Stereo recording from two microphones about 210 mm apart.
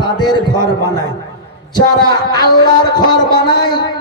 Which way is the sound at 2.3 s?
20° left (ahead or behind).